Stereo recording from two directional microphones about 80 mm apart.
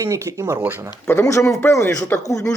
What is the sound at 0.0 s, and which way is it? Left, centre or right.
Speech, right.